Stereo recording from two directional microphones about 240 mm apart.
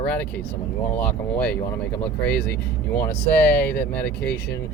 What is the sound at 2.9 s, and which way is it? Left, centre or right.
Speech, centre.